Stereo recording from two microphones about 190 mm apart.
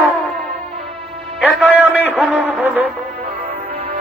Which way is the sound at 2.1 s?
5° right (ahead or behind).